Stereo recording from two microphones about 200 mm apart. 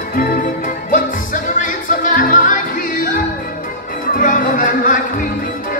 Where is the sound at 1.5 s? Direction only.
40° left (ahead or behind).